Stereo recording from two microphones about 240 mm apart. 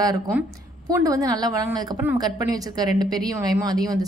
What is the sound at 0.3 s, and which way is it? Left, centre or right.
A woman's voice, centre.